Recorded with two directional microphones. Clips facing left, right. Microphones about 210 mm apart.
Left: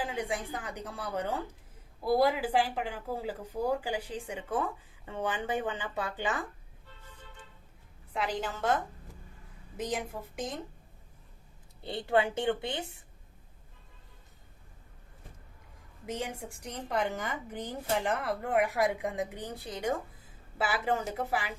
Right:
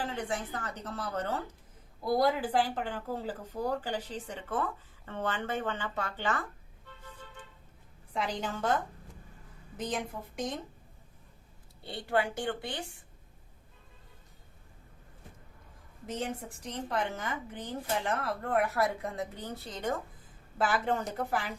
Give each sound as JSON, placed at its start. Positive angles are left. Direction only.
{"t": 0.0, "sound": "speech", "side_deg": 15}
{"t": 8.1, "sound": "a woman's voice", "side_deg": 5}
{"t": 11.8, "sound": "a woman's voice", "side_deg": 20}
{"t": 16.0, "sound": "speech", "side_deg": 10}